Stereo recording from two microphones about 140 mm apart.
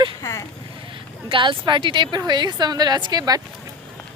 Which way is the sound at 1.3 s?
35° right (ahead or behind).